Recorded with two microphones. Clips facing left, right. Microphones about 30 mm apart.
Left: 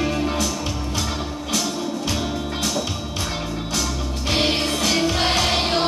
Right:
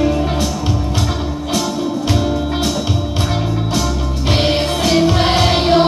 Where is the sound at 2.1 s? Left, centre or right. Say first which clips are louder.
Right 8 dB; right.